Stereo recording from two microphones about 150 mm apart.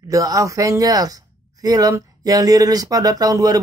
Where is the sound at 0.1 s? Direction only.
20° right (ahead or behind).